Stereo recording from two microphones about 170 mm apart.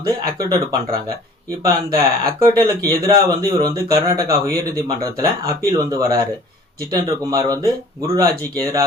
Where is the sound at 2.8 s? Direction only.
20° right (ahead or behind).